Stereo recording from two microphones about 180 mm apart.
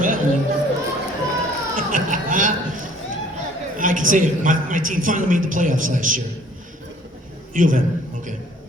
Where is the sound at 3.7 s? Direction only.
50° right (ahead or behind).